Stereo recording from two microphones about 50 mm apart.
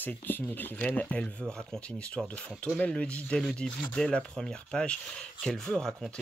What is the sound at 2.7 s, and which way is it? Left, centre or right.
Speech, left.